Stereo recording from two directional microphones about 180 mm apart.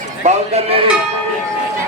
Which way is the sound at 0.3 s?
35° right (ahead or behind).